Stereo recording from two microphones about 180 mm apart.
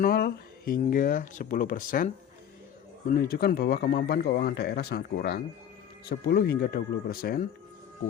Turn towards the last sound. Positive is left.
turn(degrees=55)  # may be behind; listen again after turning